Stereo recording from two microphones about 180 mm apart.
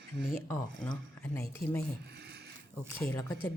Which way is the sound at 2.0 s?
65° right (ahead or behind).